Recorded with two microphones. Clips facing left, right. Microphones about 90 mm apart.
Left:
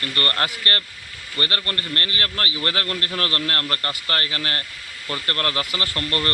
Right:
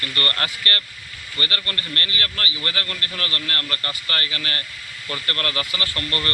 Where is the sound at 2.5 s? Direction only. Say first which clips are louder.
Left 3 dB; 55° left (ahead or behind).